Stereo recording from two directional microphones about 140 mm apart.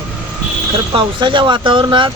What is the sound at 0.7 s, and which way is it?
Speech, 35° right (ahead or behind).